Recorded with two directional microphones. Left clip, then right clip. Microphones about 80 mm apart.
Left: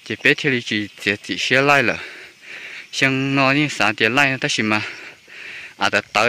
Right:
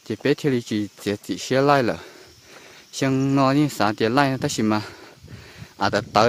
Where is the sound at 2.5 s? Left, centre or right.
Right.